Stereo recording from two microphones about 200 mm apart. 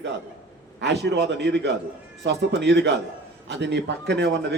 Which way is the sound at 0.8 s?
60° right (ahead or behind).